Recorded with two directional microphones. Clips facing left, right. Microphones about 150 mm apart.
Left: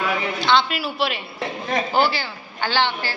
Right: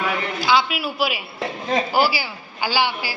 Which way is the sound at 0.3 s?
5° right (ahead or behind).